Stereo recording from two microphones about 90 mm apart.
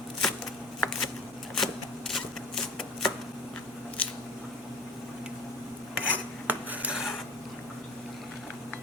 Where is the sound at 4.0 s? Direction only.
15° left (ahead or behind).